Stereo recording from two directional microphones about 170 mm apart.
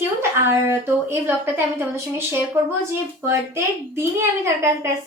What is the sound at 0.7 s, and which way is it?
Speech, 15° right (ahead or behind).